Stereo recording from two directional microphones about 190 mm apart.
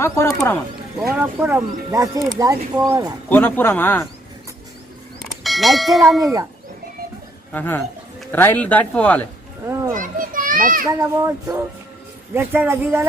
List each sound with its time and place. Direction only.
0.0 s speech: 15° left (ahead or behind)
1.2 s speech: 10° right (ahead or behind)
3.2 s speech: 10° left (ahead or behind)
5.4 s speech: centre (ahead or behind)
6.2 s speech: 15° right (ahead or behind)
7.5 s speech: 10° left (ahead or behind)
9.6 s children playing: 15° right (ahead or behind)
9.9 s children playing: 45° right (ahead or behind)
10.8 s speech: 15° right (ahead or behind)